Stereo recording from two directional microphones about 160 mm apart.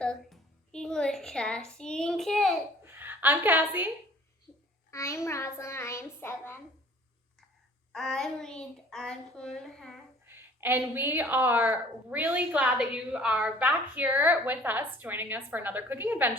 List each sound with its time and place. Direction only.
0.0 s a woman's voice: 5° left (ahead or behind)
2.8 s a woman's voice: 15° right (ahead or behind)
4.9 s a child's voice: 20° left (ahead or behind)
7.9 s a woman's voice: 5° left (ahead or behind)
10.2 s a woman's voice: 15° right (ahead or behind)